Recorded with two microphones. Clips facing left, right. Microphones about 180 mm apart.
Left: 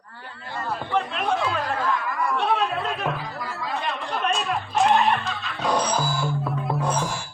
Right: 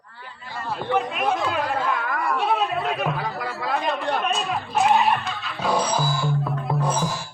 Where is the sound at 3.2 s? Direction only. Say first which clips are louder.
Right 4 dB; 70° right (ahead or behind).